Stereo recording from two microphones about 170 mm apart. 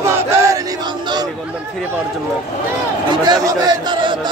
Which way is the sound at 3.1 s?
25° right (ahead or behind).